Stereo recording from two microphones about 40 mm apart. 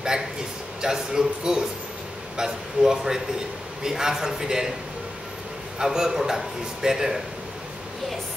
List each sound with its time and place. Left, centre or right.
0.8 s a man's voice: centre
5.8 s a man's voice: centre